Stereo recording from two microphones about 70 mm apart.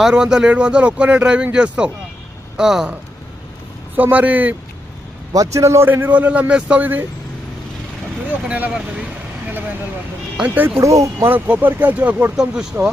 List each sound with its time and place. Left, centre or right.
0.0 s speech: centre
3.9 s a man's voice: right
5.3 s a man's voice: right
5.9 s a man's voice: right
8.3 s speech: right
10.4 s a man's voice: right
10.8 s a man's voice: right
11.3 s a man's voice: right
12.4 s speech: centre